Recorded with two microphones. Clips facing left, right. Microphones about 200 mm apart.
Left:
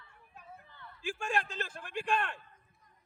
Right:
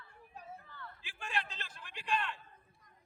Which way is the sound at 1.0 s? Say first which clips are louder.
Left 7 dB; 45° left (ahead or behind).